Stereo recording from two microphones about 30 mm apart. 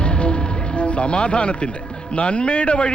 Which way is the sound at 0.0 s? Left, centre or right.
Left.